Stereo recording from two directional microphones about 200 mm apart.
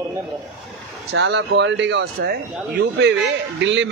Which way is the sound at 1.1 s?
65° right (ahead or behind).